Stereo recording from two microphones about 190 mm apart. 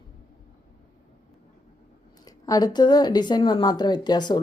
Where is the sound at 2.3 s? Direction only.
20° left (ahead or behind).